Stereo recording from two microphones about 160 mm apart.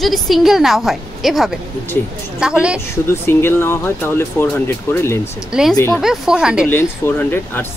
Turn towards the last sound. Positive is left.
turn(degrees=15)  # may be behind; listen again after turning